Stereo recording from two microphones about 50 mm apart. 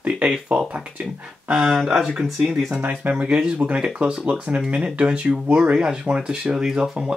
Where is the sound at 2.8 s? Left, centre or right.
Right.